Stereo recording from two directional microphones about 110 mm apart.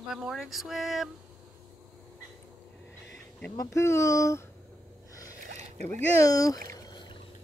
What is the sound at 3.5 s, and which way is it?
Speech, 30° left (ahead or behind).